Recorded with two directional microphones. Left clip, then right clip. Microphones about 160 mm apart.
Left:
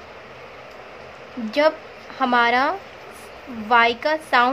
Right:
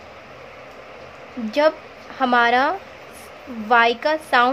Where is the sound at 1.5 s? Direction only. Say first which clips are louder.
Right 1 dB; 10° right (ahead or behind).